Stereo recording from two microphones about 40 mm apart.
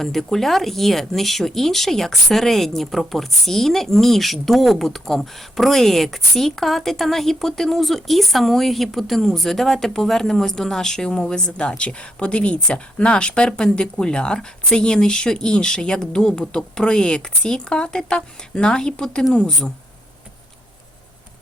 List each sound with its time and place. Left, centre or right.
0.0 s speech: centre